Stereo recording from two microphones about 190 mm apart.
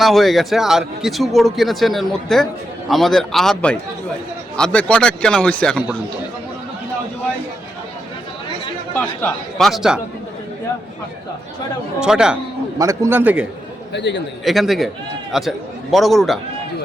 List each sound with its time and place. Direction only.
0.0 s speech: centre (ahead or behind)
9.0 s speech: 5° left (ahead or behind)
11.9 s speech: 5° right (ahead or behind)
12.8 s a man's voice: 15° right (ahead or behind)
13.9 s a man's voice: 65° left (ahead or behind)
14.4 s speech: centre (ahead or behind)